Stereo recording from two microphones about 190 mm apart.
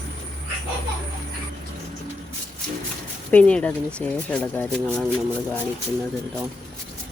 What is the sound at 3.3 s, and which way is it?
Speech, 5° left (ahead or behind).